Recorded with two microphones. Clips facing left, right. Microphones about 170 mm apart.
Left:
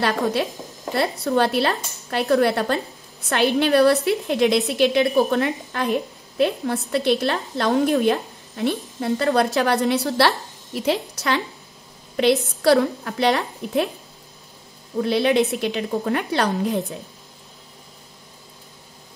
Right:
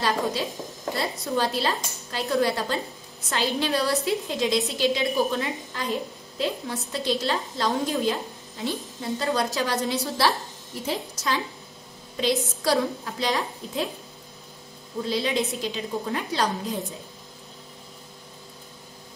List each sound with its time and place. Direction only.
0.0 s a woman's voice: 65° left (ahead or behind)
15.0 s a woman's voice: 65° left (ahead or behind)